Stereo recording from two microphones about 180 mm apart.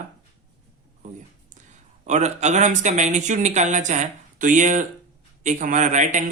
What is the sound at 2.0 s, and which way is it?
A man's voice, 40° right (ahead or behind).